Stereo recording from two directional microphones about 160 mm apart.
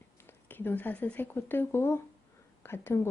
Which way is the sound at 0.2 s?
15° left (ahead or behind).